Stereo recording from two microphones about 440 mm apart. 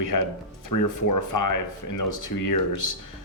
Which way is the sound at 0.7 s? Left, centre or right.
Left.